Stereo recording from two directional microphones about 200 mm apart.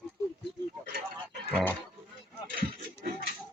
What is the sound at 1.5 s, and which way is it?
Speech, 10° left (ahead or behind).